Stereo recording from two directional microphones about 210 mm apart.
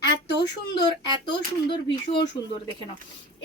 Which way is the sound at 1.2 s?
20° left (ahead or behind).